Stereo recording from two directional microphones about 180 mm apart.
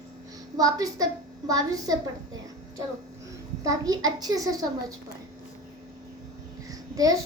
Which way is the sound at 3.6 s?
20° right (ahead or behind).